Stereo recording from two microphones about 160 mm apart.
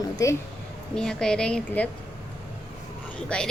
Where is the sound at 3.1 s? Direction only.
5° left (ahead or behind).